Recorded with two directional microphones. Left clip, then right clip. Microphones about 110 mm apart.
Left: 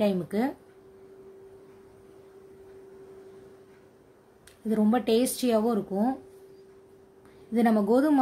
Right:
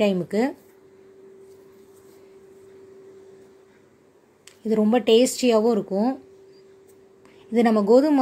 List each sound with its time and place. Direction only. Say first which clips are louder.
0.0 s speech: right 5 dB; 25° right (ahead or behind)
4.6 s speech: right 6 dB; 20° right (ahead or behind)
7.5 s speech: right 7 dB; 20° right (ahead or behind)